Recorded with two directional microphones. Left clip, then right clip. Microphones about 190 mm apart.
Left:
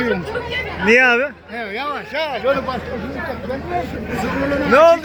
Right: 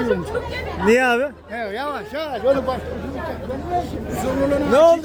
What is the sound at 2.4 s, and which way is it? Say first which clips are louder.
Speech: right 1 dB; 40° right (ahead or behind).